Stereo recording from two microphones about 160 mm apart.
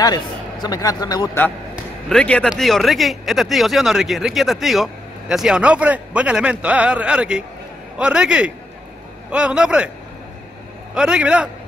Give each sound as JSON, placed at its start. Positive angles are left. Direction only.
{"t": 0.0, "sound": "a man's voice", "side_deg": 25}
{"t": 2.0, "sound": "a man's voice", "side_deg": 5}
{"t": 11.0, "sound": "speech", "side_deg": -5}